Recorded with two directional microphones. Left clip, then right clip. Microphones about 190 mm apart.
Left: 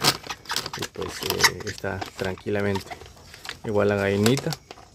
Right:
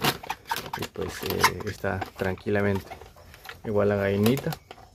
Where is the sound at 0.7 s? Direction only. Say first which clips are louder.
Left 2 dB; centre (ahead or behind).